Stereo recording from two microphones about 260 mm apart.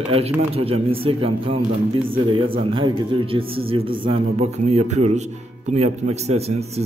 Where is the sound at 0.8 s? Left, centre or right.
Right.